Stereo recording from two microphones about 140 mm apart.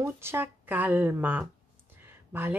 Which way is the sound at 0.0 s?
15° right (ahead or behind).